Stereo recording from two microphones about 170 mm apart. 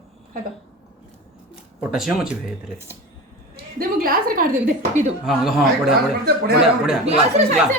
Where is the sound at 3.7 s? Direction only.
55° right (ahead or behind).